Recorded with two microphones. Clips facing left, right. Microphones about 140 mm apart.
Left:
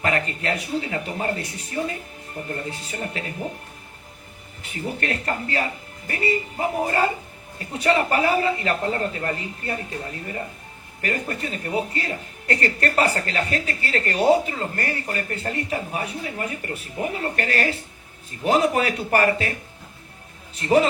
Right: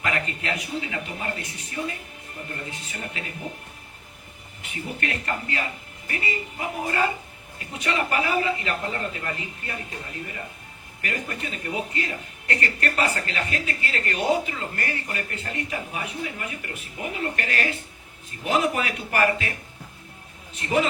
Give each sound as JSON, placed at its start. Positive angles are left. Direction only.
{"t": 0.0, "sound": "speech", "side_deg": 40}
{"t": 4.6, "sound": "speech", "side_deg": 35}
{"t": 11.0, "sound": "speech", "side_deg": 35}
{"t": 20.6, "sound": "speech", "side_deg": 35}